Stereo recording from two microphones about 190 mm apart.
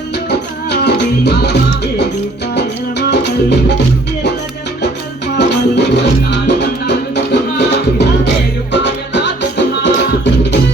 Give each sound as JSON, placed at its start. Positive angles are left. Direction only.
{"t": 0.3, "sound": "music", "side_deg": 60}
{"t": 3.1, "sound": "music", "side_deg": 60}
{"t": 5.4, "sound": "music", "side_deg": 65}